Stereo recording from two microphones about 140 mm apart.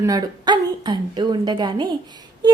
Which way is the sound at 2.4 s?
30° right (ahead or behind).